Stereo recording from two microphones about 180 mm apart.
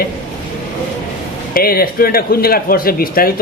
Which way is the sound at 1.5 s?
55° left (ahead or behind).